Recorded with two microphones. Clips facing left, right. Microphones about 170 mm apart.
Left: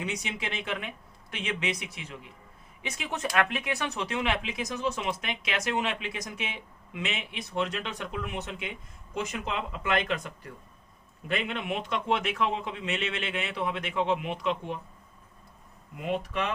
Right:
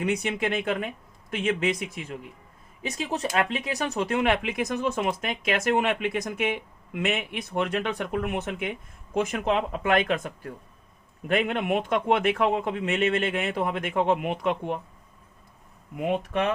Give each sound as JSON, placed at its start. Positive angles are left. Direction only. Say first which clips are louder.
{"t": 0.0, "sound": "speech", "louder": "right 8 dB", "side_deg": -55}
{"t": 16.0, "sound": "speech", "louder": "right 5 dB", "side_deg": -55}